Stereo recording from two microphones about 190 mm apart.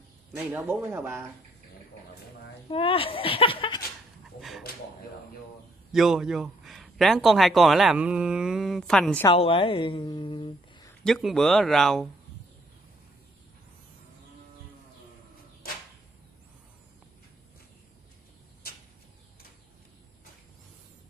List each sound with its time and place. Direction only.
0.5 s speech: 10° right (ahead or behind)
2.7 s a woman's voice: 30° left (ahead or behind)
4.4 s a man's voice: centre (ahead or behind)
5.9 s a man's voice: centre (ahead or behind)
9.3 s a woman's voice: 30° left (ahead or behind)
11.1 s a man's voice: centre (ahead or behind)
18.6 s a sound: 55° left (ahead or behind)